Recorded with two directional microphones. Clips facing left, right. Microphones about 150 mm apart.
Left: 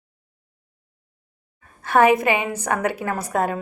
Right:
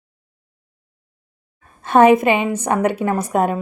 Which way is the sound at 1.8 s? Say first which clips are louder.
Right 5 dB; 25° right (ahead or behind).